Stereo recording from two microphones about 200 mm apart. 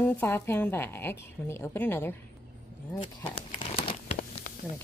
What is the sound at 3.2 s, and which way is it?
Crumpling, 25° left (ahead or behind).